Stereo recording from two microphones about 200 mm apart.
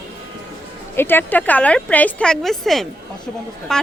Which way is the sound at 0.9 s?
10° left (ahead or behind).